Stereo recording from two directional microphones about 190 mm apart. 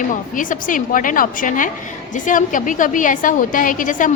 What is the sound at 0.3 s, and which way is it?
A woman's voice, 45° left (ahead or behind).